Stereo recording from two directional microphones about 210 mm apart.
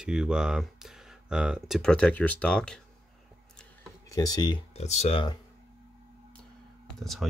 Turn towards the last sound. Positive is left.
turn(degrees=0)  # may be behind; listen again after turning